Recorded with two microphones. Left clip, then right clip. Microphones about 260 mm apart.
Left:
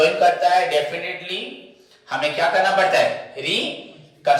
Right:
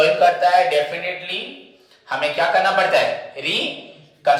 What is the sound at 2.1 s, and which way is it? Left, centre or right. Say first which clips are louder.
A man's voice: right 1 dB; centre.